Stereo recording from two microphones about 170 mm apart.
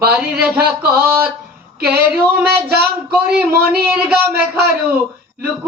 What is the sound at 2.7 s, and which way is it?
Speech, 65° right (ahead or behind).